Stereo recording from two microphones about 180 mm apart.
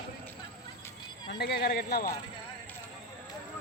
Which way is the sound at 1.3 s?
65° left (ahead or behind).